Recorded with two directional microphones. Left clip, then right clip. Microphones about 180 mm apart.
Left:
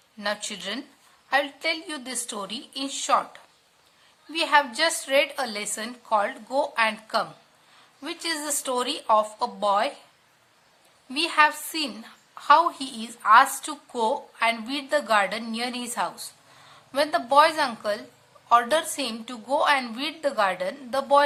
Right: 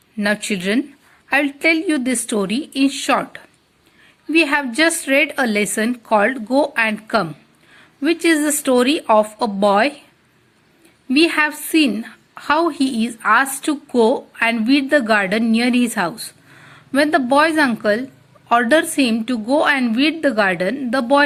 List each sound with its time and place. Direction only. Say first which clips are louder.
0.2 s a woman's voice: right 9 dB; 25° right (ahead or behind)
11.1 s a woman's voice: right 5 dB; 25° right (ahead or behind)